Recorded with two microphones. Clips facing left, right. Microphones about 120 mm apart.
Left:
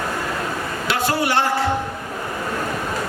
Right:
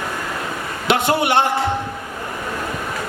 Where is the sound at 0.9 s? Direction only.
20° right (ahead or behind).